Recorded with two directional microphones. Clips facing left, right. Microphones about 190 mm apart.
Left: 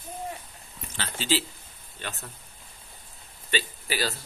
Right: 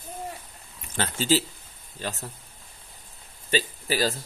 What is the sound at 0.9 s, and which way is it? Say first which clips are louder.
Speech: right 5 dB; 45° right (ahead or behind).